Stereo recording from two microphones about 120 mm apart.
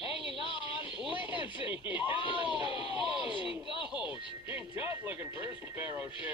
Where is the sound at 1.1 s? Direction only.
15° right (ahead or behind).